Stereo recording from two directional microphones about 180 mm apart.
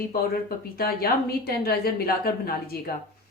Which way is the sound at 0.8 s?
60° left (ahead or behind).